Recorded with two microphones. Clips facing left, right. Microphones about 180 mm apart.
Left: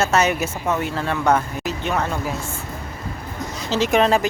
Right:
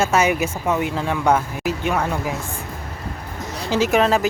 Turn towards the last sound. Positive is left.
turn(degrees=0)  # may be behind; listen again after turning